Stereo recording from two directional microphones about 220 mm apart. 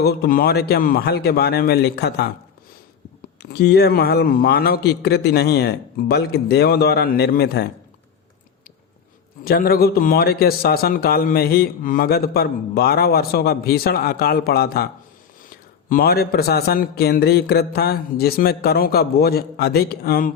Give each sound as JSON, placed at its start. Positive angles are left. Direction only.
{"t": 0.0, "sound": "a man's voice", "side_deg": 45}
{"t": 3.4, "sound": "a man's voice", "side_deg": 50}
{"t": 9.4, "sound": "a man's voice", "side_deg": 45}
{"t": 15.9, "sound": "a man's voice", "side_deg": 45}